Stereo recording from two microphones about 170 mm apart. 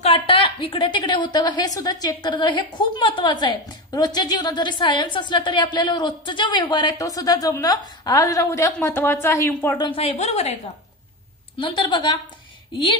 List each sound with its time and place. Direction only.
0.0 s a woman's voice: 35° left (ahead or behind); by 9.8 s 15° left (ahead or behind)
9.8 s a woman's voice: 30° left (ahead or behind)
11.5 s a woman's voice: 30° left (ahead or behind)